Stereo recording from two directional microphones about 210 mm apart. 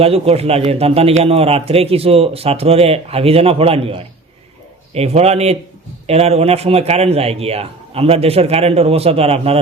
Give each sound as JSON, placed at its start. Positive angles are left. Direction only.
{"t": 0.0, "sound": "a man's voice", "side_deg": -30}